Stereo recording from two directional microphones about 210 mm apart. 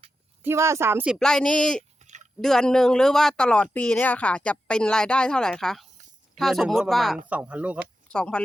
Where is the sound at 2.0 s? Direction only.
35° right (ahead or behind).